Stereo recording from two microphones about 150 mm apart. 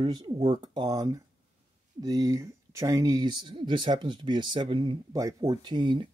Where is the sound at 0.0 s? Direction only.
30° right (ahead or behind).